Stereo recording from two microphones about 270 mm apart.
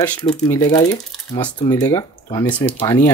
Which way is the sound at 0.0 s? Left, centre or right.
Centre.